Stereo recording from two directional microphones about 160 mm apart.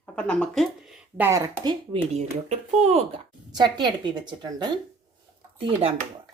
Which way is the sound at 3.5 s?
25° right (ahead or behind).